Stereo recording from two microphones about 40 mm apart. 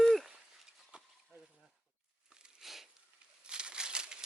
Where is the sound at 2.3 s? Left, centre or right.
Right.